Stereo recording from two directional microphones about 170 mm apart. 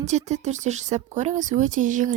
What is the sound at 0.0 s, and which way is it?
A woman's voice, 45° right (ahead or behind).